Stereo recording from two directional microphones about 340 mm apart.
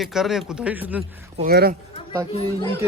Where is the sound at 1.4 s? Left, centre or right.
Right.